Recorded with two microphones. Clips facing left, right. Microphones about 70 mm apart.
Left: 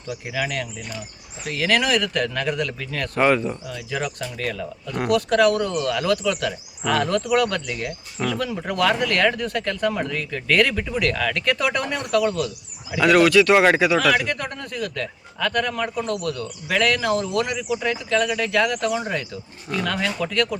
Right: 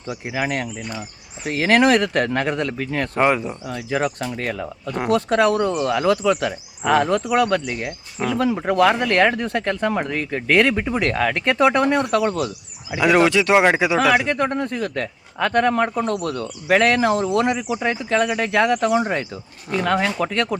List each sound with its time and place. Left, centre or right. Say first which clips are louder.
0.1 s speech: right 3 dB; right
3.2 s speech: even; centre
3.7 s speech: right 5 dB; right
12.9 s speech: even; centre